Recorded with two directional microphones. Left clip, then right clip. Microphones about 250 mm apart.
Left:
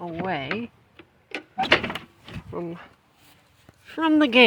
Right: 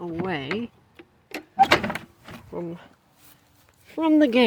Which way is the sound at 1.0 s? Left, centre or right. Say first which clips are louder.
Left 1 dB; right.